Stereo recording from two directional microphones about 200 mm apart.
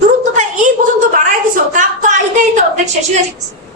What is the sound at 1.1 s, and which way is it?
A woman's voice, 40° right (ahead or behind).